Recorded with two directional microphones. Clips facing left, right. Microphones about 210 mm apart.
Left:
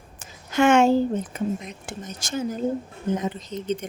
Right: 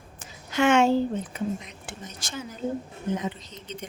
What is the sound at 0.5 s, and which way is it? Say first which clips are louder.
Speech: left 3 dB; 50° left (ahead or behind).